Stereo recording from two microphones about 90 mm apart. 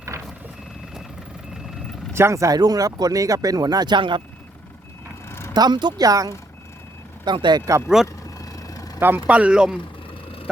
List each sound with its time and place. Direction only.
0.1 s reversing beeps: 35° right (ahead or behind)
1.5 s vehicle: centre (ahead or behind)
2.1 s speech: 30° right (ahead or behind); by 4.2 s 60° right (ahead or behind)
5.3 s vehicle: 25° left (ahead or behind)
5.5 s speech: 50° right (ahead or behind)
7.3 s speech: 60° right (ahead or behind)
8.0 s vehicle: 40° left (ahead or behind)
9.0 s speech: 25° right (ahead or behind)